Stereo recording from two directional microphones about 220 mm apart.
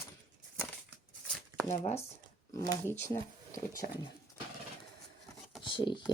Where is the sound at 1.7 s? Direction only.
30° left (ahead or behind).